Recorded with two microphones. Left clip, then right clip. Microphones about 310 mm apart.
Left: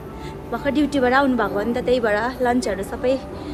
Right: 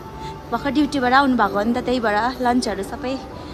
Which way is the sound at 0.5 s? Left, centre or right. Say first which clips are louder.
Even; centre.